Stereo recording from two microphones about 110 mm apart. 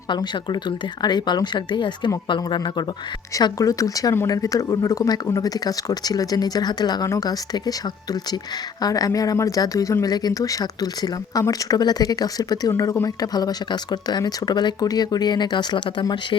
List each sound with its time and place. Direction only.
0.1 s speech: 45° left (ahead or behind)
3.3 s speech: 30° left (ahead or behind)